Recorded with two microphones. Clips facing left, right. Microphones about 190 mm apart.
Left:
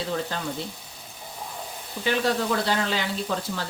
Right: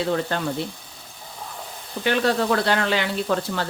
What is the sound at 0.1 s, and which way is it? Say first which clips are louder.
Speech: right 5 dB; 60° right (ahead or behind).